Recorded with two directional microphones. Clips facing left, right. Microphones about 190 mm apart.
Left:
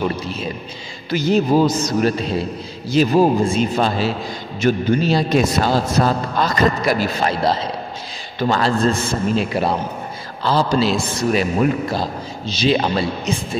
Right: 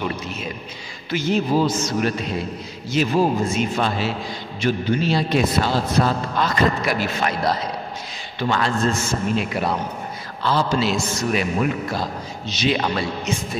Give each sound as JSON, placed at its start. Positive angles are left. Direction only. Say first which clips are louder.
{"t": 0.1, "sound": "a man's voice", "louder": "left 4 dB", "side_deg": 30}